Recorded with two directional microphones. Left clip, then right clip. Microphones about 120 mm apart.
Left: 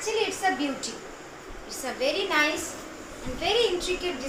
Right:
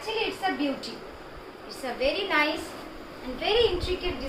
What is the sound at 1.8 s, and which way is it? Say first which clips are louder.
A woman's voice: even; centre (ahead or behind).